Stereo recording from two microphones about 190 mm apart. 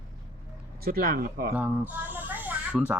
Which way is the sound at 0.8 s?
50° right (ahead or behind).